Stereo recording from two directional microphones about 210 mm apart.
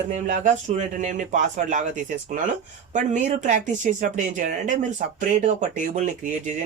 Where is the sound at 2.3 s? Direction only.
40° right (ahead or behind).